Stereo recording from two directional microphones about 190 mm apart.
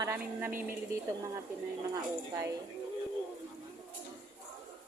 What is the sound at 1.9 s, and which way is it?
Speech, 15° right (ahead or behind).